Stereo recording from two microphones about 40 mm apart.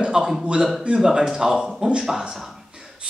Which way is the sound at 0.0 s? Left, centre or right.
Right.